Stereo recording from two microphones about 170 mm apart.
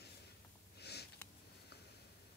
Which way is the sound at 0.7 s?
75° left (ahead or behind).